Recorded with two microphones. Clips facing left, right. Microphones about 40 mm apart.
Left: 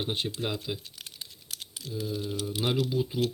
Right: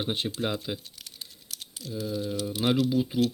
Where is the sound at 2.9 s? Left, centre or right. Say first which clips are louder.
Right 3 dB; centre.